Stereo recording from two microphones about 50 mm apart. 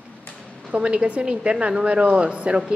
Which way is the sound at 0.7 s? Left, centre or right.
Right.